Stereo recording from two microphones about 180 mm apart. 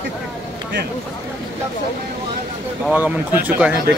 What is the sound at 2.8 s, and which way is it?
Speech, 10° right (ahead or behind).